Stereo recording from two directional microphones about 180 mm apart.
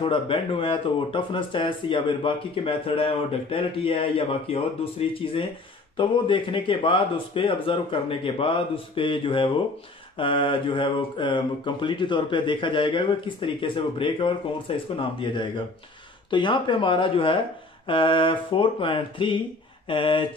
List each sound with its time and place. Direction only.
0.0 s speech: 30° left (ahead or behind)